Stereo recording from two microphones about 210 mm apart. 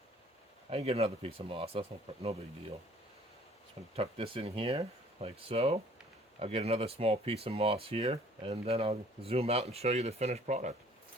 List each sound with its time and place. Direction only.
0.7 s speech: 30° right (ahead or behind)
3.9 s speech: 25° right (ahead or behind)